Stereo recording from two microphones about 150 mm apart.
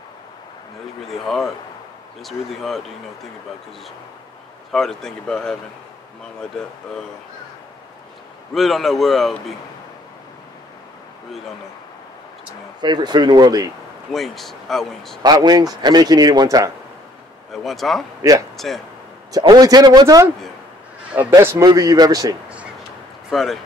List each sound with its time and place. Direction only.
1.0 s speech: centre (ahead or behind)
4.7 s speech: 5° left (ahead or behind)
8.5 s speech: centre (ahead or behind)
12.8 s speech: 30° right (ahead or behind)
14.1 s speech: centre (ahead or behind)
15.2 s speech: 25° right (ahead or behind)
17.5 s speech: centre (ahead or behind)
19.4 s speech: 25° right (ahead or behind)
21.4 s a man's voice: 15° right (ahead or behind)
23.3 s speech: centre (ahead or behind)